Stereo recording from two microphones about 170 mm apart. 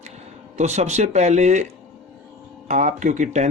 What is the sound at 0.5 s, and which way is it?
Speech, 40° right (ahead or behind).